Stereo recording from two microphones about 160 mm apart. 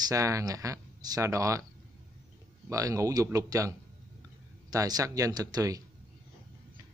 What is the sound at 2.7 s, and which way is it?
Speech, 20° right (ahead or behind).